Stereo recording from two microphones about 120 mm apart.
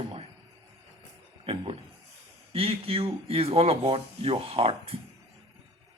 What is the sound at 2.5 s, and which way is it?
Speech, 50° right (ahead or behind).